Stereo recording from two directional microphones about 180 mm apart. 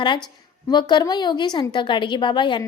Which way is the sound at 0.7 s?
25° left (ahead or behind).